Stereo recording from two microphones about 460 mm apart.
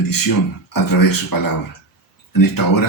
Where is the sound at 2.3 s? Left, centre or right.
Left.